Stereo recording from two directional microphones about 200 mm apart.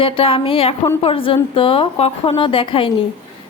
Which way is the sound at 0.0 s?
25° left (ahead or behind).